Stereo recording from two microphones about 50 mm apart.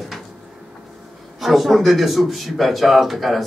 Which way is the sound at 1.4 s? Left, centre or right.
Centre.